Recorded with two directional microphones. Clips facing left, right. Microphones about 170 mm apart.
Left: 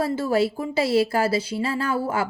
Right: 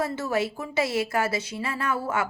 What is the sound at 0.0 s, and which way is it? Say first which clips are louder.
A woman's voice: left 5 dB; 30° left (ahead or behind).